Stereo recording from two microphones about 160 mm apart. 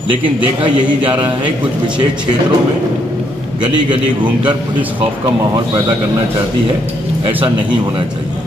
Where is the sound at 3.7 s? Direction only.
30° right (ahead or behind).